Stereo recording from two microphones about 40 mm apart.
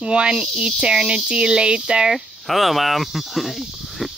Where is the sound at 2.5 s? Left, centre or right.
Centre.